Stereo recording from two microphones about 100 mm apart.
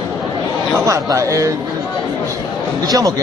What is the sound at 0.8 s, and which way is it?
Speech, 30° right (ahead or behind).